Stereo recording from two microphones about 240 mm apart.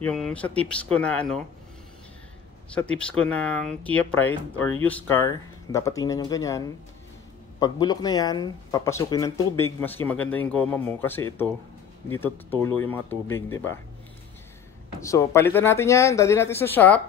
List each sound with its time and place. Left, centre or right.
0.0 s speech: centre
2.7 s speech: centre
15.0 s speech: centre